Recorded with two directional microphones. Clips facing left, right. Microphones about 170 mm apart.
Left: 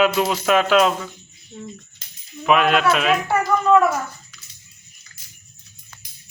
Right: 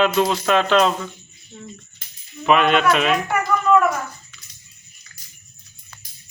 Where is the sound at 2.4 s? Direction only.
Centre (ahead or behind).